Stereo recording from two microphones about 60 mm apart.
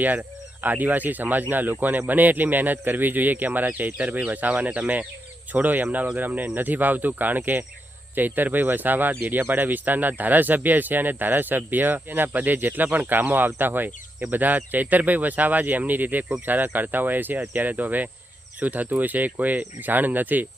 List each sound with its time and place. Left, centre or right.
0.0 s speech: right